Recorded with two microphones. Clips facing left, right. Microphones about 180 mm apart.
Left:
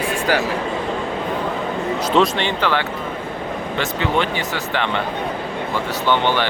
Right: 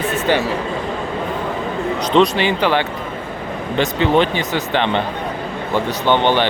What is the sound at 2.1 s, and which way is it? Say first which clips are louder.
Speech: right 4 dB; centre (ahead or behind).